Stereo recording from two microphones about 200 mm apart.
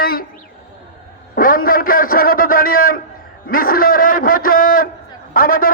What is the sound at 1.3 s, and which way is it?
A man's voice, 45° left (ahead or behind).